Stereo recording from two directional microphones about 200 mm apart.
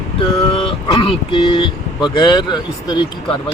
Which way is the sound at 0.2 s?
25° left (ahead or behind).